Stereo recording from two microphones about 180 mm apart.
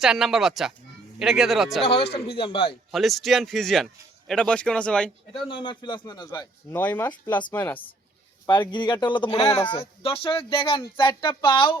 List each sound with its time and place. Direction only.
0.0 s speech: centre (ahead or behind)
1.8 s speech: 35° left (ahead or behind)
2.9 s speech: centre (ahead or behind)
5.5 s speech: 25° left (ahead or behind)
6.7 s speech: 10° left (ahead or behind)
8.7 s speech: 25° left (ahead or behind)